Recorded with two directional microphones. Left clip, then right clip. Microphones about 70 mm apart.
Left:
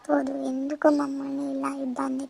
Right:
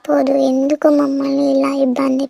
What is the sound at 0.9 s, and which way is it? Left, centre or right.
Speech, right.